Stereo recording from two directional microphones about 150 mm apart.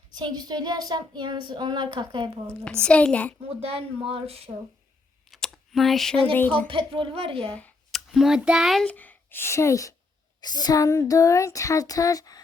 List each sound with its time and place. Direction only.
0.1 s a sound: 30° right (ahead or behind)
2.8 s a woman's voice: 5° left (ahead or behind)
3.6 s a woman's voice: 40° right (ahead or behind)
5.3 s speech: centre (ahead or behind)
6.7 s a woman's voice: 35° right (ahead or behind)
7.5 s speech: 5° left (ahead or behind); by 12.4 s 25° left (ahead or behind)